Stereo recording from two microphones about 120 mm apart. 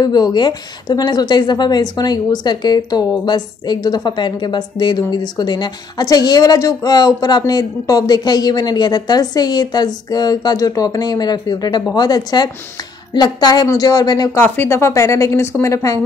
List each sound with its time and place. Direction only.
0.0 s a woman's voice: 35° left (ahead or behind)
14.4 s speech: 20° left (ahead or behind)